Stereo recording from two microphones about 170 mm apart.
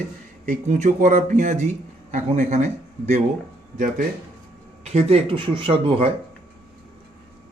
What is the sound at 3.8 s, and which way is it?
Speech, 55° right (ahead or behind).